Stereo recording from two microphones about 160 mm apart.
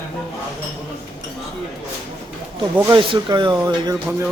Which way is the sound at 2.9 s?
30° right (ahead or behind).